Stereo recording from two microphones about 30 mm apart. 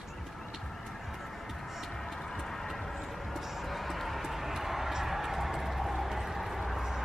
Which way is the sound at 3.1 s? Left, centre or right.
Centre.